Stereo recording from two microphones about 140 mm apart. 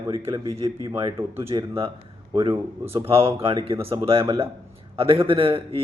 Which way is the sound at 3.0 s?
45° right (ahead or behind).